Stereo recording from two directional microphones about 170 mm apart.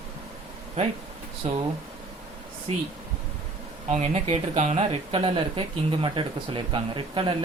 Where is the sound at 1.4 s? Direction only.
45° right (ahead or behind).